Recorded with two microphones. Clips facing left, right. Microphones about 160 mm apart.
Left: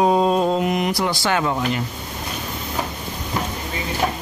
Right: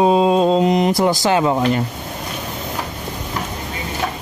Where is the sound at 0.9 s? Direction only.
45° right (ahead or behind).